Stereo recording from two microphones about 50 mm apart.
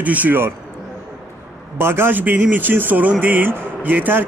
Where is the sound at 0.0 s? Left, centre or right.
Right.